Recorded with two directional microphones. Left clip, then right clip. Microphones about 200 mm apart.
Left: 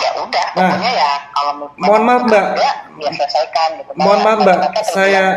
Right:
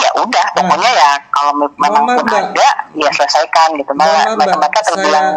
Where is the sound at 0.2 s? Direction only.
40° right (ahead or behind).